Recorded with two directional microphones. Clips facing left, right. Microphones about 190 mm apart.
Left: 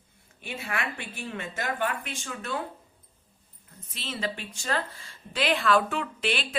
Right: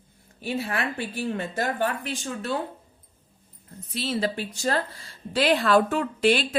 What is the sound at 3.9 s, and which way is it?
A woman's voice, 35° right (ahead or behind).